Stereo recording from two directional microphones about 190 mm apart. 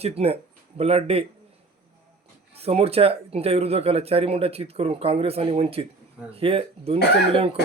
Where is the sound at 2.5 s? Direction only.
30° right (ahead or behind).